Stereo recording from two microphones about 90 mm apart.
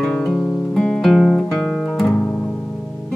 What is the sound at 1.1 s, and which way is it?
Guitar, centre (ahead or behind).